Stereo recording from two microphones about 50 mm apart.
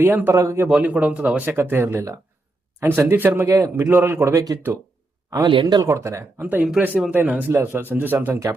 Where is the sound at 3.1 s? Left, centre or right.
Right.